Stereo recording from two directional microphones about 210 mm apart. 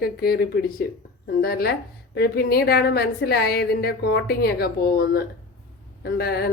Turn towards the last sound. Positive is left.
turn(degrees=50)  # may be behind; listen again after turning